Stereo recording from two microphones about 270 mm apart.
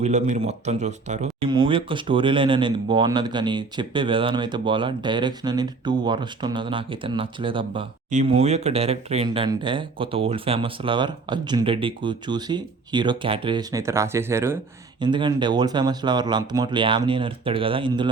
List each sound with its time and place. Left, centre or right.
0.0 s speech: right